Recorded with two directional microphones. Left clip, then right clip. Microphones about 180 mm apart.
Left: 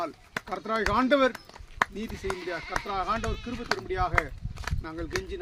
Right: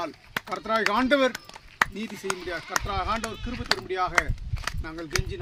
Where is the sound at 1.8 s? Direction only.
20° right (ahead or behind).